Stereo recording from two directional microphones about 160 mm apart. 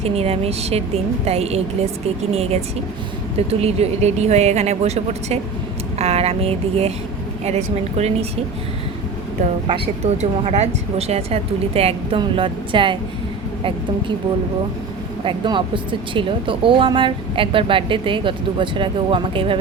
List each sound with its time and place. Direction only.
0.0 s speech: 40° right (ahead or behind)
9.6 s speech: 35° right (ahead or behind)
15.2 s speech: 30° right (ahead or behind)